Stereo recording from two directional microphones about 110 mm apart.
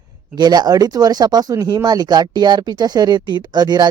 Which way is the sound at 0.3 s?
40° right (ahead or behind).